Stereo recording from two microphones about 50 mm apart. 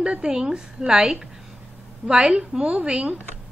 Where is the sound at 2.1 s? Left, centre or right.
Centre.